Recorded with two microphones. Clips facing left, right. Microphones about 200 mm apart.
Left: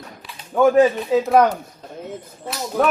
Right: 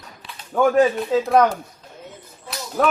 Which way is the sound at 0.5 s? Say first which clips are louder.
Left 2 dB; 10° left (ahead or behind).